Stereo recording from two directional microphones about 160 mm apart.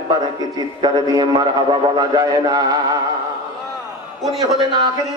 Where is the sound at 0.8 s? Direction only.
25° right (ahead or behind).